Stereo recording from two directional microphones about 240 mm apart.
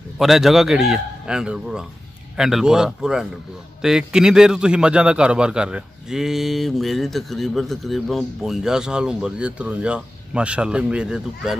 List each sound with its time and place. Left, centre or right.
0.2 s a man's voice: centre